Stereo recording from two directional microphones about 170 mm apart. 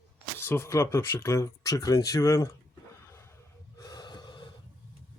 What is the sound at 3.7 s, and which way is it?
Gasp, 25° left (ahead or behind).